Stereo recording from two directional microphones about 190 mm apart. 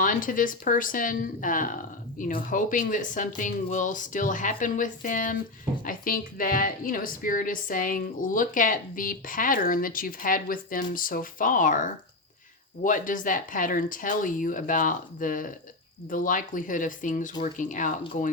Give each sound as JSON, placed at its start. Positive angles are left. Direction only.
{"t": 0.0, "sound": "a woman's voice", "side_deg": 45}